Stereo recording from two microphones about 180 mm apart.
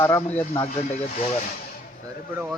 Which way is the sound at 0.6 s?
35° left (ahead or behind).